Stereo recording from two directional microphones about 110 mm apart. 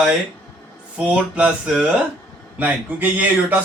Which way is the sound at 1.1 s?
10° right (ahead or behind).